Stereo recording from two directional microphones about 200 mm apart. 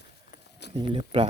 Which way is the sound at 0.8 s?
25° right (ahead or behind).